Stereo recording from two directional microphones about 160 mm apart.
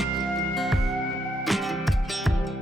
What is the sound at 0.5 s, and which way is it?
Music, centre (ahead or behind).